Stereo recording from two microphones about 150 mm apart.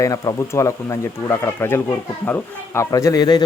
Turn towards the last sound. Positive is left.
turn(degrees=25)  # may be behind; listen again after turning